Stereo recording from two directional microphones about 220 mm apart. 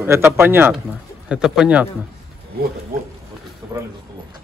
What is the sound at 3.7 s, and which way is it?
Speech, 20° right (ahead or behind).